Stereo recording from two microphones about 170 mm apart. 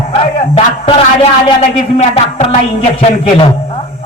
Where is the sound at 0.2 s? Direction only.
30° left (ahead or behind).